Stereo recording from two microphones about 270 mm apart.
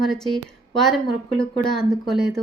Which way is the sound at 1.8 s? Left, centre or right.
Centre.